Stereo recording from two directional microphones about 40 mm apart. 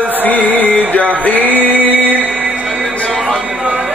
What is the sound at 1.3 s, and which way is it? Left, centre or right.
Music, right.